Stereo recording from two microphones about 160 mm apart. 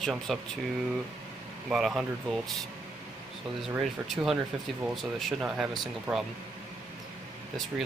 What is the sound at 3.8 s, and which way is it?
Speech, centre (ahead or behind).